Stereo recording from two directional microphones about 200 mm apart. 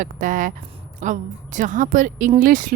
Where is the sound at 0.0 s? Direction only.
40° right (ahead or behind).